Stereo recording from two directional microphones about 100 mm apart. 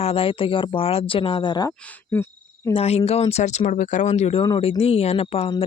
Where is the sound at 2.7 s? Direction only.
90° left.